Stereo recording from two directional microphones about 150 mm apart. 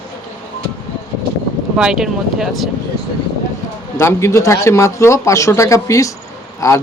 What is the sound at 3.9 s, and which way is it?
Speech, 20° left (ahead or behind).